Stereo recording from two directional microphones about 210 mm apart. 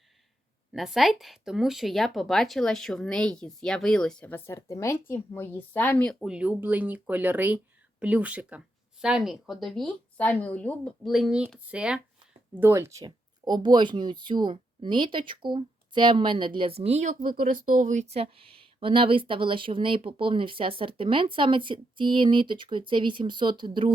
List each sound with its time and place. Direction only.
0.7 s speech: centre (ahead or behind); by 23.9 s 25° right (ahead or behind)